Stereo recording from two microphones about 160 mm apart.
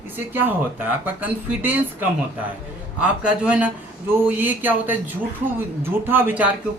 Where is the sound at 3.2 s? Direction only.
5° right (ahead or behind).